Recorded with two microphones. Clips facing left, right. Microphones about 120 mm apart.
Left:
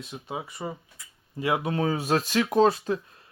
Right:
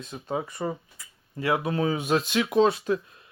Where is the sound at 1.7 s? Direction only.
35° left (ahead or behind).